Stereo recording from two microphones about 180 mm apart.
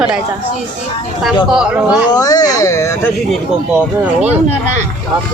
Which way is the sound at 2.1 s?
20° left (ahead or behind).